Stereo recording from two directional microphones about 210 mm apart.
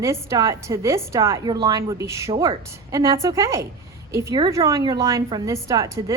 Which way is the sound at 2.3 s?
25° right (ahead or behind).